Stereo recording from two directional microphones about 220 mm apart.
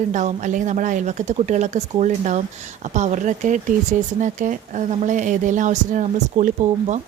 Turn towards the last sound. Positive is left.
turn(degrees=-35)  # may be behind; listen again after turning